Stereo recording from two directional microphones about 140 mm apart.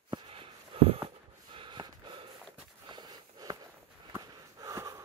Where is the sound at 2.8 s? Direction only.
30° right (ahead or behind).